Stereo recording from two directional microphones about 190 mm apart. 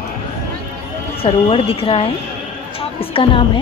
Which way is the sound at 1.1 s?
30° left (ahead or behind).